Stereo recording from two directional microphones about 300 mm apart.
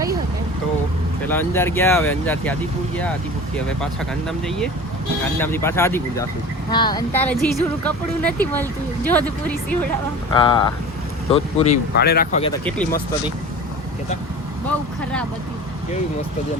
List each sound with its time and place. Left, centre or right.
1.3 s speech: centre
4.3 s a woman's voice: centre
10.3 s speech: centre
11.9 s speech: left